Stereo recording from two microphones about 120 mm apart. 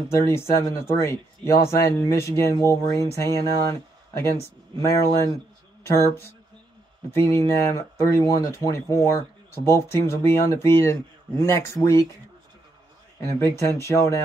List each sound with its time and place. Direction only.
0.1 s speech: 25° left (ahead or behind)
7.1 s speech: 20° left (ahead or behind)
13.2 s speech: 20° left (ahead or behind)